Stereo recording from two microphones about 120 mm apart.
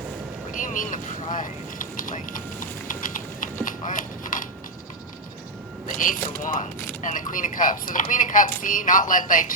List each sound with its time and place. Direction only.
0.6 s vehicle: 90° left
5.9 s a sound: 90° left
6.4 s speech: 90° left